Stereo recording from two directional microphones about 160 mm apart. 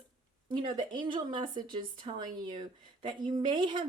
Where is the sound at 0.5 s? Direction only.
30° right (ahead or behind).